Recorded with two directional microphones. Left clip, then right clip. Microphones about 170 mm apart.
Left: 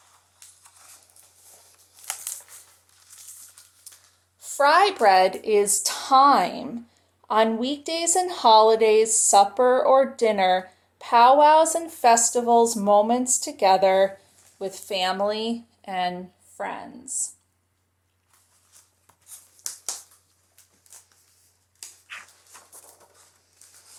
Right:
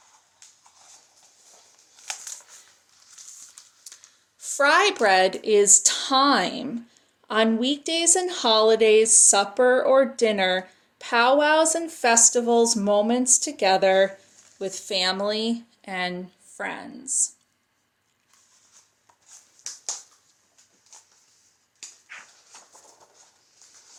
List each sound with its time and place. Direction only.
3.9 s snort: 40° right (ahead or behind)
4.4 s a woman's voice: 40° right (ahead or behind)
19.6 s a sound: 30° left (ahead or behind)
22.0 s dog: 15° left (ahead or behind)